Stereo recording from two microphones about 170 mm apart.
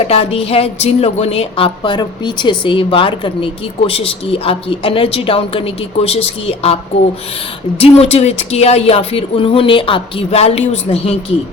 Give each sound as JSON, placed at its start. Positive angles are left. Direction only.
{"t": 0.1, "sound": "speech", "side_deg": 35}
{"t": 7.8, "sound": "speech", "side_deg": 40}